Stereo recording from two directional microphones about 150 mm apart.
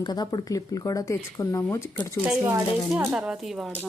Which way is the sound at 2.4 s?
15° right (ahead or behind).